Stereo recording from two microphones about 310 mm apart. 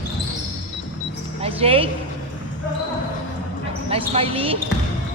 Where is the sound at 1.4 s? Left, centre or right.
Centre.